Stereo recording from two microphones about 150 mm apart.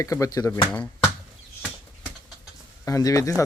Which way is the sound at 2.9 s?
20° left (ahead or behind).